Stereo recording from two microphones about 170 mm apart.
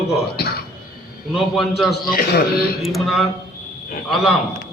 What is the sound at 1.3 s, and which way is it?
Speech, centre (ahead or behind).